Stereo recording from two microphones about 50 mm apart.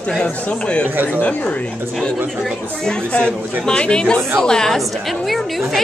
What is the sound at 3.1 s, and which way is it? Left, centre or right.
A woman's voice, left.